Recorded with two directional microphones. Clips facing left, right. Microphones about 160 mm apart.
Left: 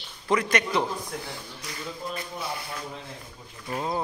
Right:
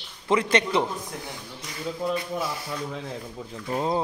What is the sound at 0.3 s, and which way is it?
Speech, 25° right (ahead or behind).